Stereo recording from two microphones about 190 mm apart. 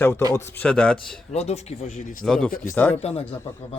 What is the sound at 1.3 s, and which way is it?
Speech, 35° left (ahead or behind).